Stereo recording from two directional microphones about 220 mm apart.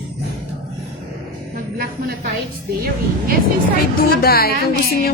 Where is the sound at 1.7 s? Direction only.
45° right (ahead or behind).